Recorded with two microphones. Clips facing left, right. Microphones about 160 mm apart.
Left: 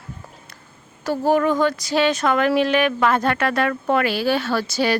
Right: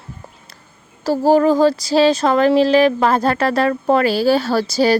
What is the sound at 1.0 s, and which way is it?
A woman's voice, 35° right (ahead or behind).